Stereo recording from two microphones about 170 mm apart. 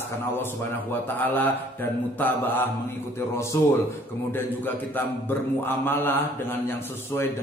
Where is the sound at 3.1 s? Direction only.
15° left (ahead or behind).